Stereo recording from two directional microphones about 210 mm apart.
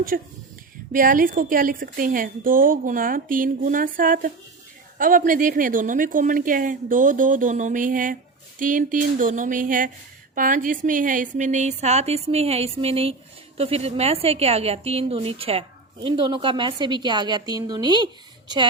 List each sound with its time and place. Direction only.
0.1 s a woman's voice: 45° right (ahead or behind); by 18.7 s 20° right (ahead or behind)